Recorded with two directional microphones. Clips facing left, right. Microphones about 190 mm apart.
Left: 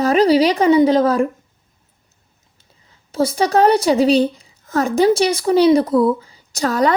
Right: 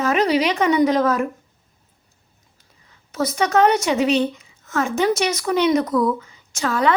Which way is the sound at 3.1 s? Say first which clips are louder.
Left 4 dB; 30° left (ahead or behind).